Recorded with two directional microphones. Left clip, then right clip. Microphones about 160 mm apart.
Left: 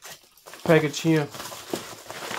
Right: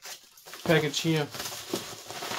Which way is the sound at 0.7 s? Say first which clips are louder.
Left 5 dB; 45° left (ahead or behind).